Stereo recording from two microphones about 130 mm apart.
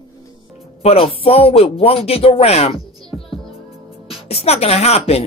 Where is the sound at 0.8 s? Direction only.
50° left (ahead or behind).